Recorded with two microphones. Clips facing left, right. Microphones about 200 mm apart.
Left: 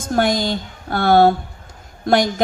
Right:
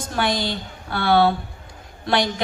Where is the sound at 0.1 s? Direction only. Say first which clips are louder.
Left 6 dB; 45° left (ahead or behind).